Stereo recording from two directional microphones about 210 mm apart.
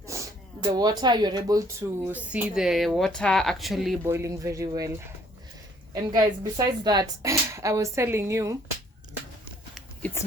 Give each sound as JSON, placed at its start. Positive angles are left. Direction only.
{"t": 0.1, "sound": "a sound", "side_deg": -15}
{"t": 0.6, "sound": "speech", "side_deg": -20}
{"t": 4.0, "sound": "speech", "side_deg": -15}
{"t": 5.9, "sound": "speech", "side_deg": -15}